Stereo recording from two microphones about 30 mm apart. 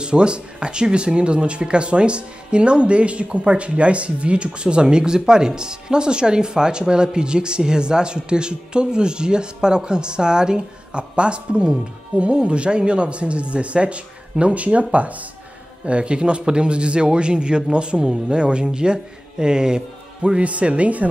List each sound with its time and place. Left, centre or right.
0.0 s speech: right
15.8 s speech: right
20.3 s speech: right